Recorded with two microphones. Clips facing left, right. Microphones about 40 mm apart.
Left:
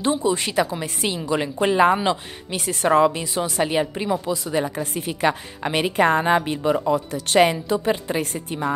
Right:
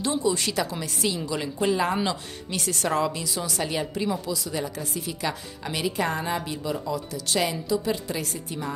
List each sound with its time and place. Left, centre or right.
0.2 s a woman's voice: left
2.0 s a woman's voice: left